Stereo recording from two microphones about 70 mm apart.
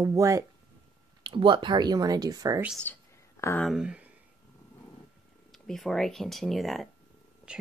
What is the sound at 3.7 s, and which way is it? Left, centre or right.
Speech, centre.